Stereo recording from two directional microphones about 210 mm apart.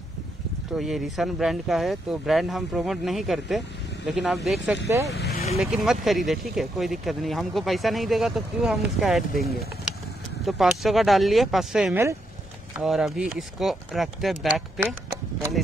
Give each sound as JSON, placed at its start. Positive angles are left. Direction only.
{"t": 0.7, "sound": "speech", "side_deg": 0}
{"t": 4.8, "sound": "speech", "side_deg": -15}
{"t": 5.1, "sound": "vehicle", "side_deg": 50}
{"t": 5.6, "sound": "speech", "side_deg": 0}
{"t": 10.4, "sound": "speech", "side_deg": 0}